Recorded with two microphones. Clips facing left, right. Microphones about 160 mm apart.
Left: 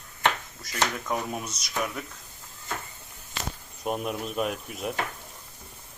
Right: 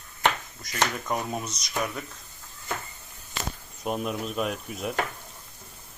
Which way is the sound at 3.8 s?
Centre (ahead or behind).